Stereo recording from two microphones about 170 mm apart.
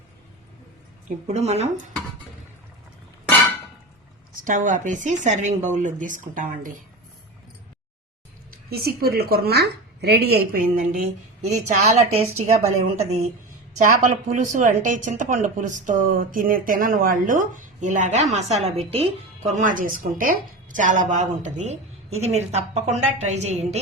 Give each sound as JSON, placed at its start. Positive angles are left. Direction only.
{"t": 1.0, "sound": "a woman's voice", "side_deg": -40}
{"t": 4.4, "sound": "a woman's voice", "side_deg": -50}
{"t": 8.7, "sound": "a woman's voice", "side_deg": -65}
{"t": 11.4, "sound": "a woman's voice", "side_deg": -45}